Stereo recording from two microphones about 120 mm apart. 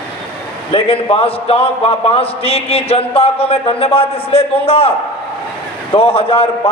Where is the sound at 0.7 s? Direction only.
50° left (ahead or behind).